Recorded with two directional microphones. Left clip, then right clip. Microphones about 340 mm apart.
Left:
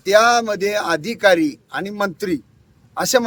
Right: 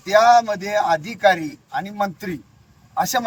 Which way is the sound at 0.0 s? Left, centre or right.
Centre.